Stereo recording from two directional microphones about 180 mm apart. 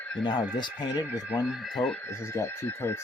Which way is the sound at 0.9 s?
10° right (ahead or behind).